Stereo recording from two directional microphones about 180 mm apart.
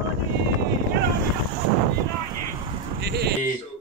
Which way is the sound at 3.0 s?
65° right (ahead or behind).